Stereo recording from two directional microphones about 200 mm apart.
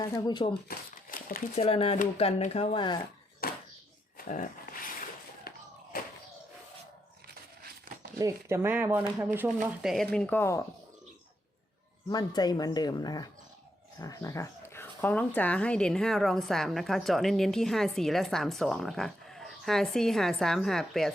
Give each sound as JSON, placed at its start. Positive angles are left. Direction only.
{"t": 0.0, "sound": "speech", "side_deg": 20}
{"t": 0.7, "sound": "crumpling", "side_deg": 45}
{"t": 1.5, "sound": "speech", "side_deg": 30}
{"t": 3.4, "sound": "a sound", "side_deg": 50}
{"t": 7.9, "sound": "crumpling", "side_deg": -45}
{"t": 8.2, "sound": "speech", "side_deg": -15}
{"t": 9.9, "sound": "speech", "side_deg": 0}
{"t": 12.0, "sound": "speech", "side_deg": 20}